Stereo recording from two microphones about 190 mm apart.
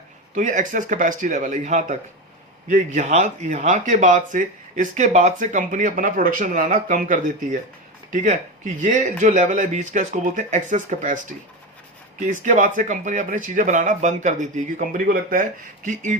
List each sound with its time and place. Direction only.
0.3 s speech: 40° right (ahead or behind)
12.2 s speech: 40° right (ahead or behind)